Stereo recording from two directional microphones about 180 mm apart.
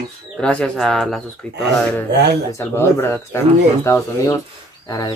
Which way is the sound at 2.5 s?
15° left (ahead or behind).